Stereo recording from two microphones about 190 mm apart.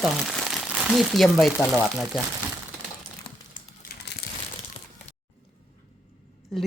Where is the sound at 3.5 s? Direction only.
50° left (ahead or behind).